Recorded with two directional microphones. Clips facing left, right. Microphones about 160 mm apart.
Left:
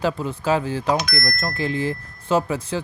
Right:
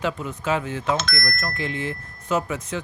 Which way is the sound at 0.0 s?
35° left (ahead or behind).